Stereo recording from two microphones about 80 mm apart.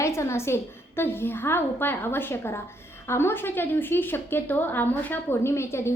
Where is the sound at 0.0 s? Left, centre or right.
Left.